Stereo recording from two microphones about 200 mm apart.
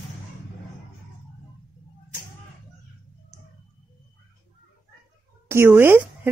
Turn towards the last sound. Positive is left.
turn(degrees=-10)  # may be behind; listen again after turning